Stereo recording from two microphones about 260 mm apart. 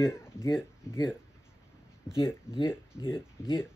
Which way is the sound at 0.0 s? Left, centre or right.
Centre.